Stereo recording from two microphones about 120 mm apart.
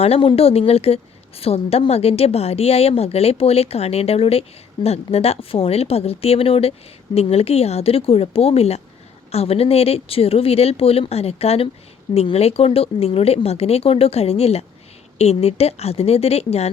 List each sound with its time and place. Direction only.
0.0 s a woman's voice: 50° left (ahead or behind)